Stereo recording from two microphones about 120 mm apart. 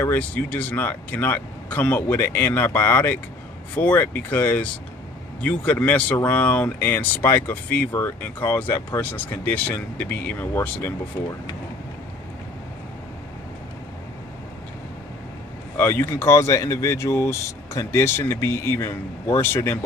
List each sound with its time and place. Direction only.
0.0 s speech: 15° left (ahead or behind)
15.8 s speech: 15° left (ahead or behind)